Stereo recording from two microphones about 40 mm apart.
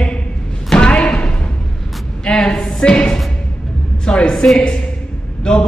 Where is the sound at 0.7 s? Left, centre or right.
Left.